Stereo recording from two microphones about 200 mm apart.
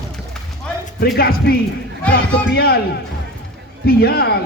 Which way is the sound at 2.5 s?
50° left (ahead or behind).